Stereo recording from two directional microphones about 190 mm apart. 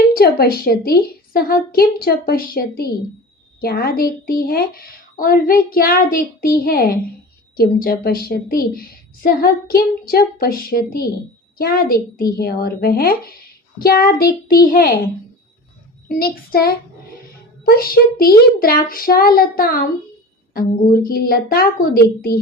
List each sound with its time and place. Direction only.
0.1 s a woman's voice: 50° left (ahead or behind)
16.0 s a woman's voice: 50° left (ahead or behind)